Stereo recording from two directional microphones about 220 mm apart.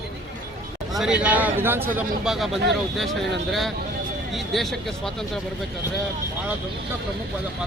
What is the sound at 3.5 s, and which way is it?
Speech, centre (ahead or behind).